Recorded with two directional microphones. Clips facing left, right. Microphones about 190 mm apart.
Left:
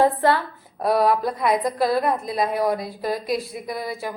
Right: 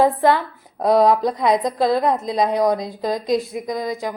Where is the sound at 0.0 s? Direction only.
15° right (ahead or behind).